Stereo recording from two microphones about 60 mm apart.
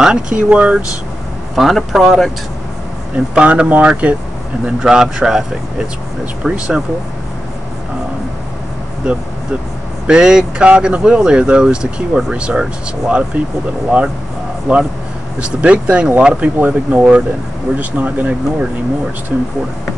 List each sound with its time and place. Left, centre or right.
0.0 s speech: centre
1.5 s speech: centre
3.3 s speech: right
9.0 s speech: centre
16.5 s speech: right